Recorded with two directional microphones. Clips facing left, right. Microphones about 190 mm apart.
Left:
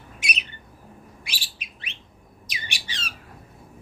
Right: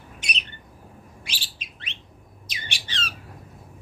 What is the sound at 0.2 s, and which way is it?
Squawk, 10° left (ahead or behind).